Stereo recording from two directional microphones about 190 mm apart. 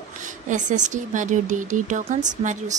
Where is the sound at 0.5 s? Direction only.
40° right (ahead or behind).